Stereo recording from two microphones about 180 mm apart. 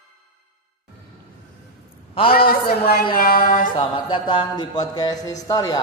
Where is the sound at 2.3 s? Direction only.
55° left (ahead or behind).